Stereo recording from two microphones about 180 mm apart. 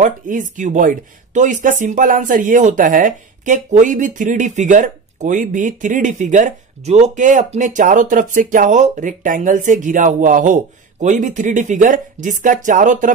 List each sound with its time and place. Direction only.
0.0 s speech: 45° right (ahead or behind)